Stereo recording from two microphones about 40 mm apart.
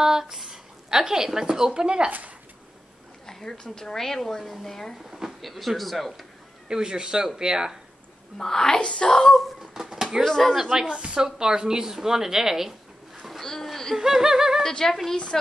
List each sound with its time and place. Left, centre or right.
0.0 s speech: centre
2.0 s speech: right
3.3 s speech: centre
5.1 s speech: centre
6.7 s a sound: centre
8.4 s speech: centre
9.6 s a sound: centre
10.2 s speech: centre
10.5 s speech: centre
13.4 s a sound: centre
13.9 s a sound: centre
14.7 s a woman's voice: centre